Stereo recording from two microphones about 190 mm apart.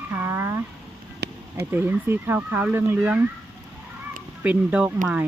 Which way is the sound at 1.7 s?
10° right (ahead or behind).